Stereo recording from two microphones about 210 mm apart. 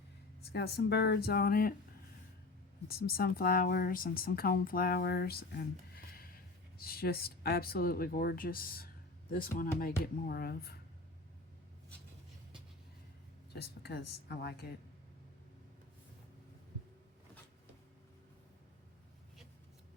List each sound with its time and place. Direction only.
0.4 s speech: 50° left (ahead or behind)
2.8 s speech: 45° left (ahead or behind)
13.5 s speech: 50° left (ahead or behind)